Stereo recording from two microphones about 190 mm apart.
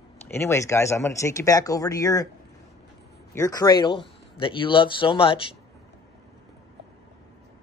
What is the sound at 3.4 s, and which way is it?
Speech, 20° left (ahead or behind).